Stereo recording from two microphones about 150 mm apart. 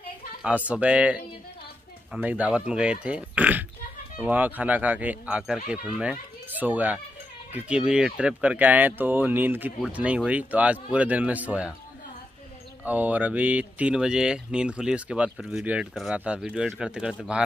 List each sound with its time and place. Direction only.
0.7 s speech: 10° right (ahead or behind)
12.8 s speech: 10° right (ahead or behind)